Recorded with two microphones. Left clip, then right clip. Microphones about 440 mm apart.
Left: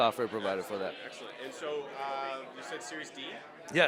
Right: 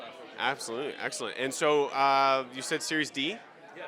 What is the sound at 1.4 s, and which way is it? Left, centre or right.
Speech, right.